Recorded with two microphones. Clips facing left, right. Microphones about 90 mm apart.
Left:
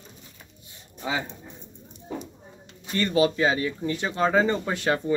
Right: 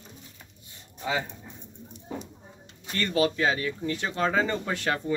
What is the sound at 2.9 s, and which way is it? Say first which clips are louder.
Speech: left 3 dB; 10° left (ahead or behind).